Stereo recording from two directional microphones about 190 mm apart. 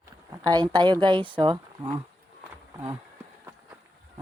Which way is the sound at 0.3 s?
20° right (ahead or behind).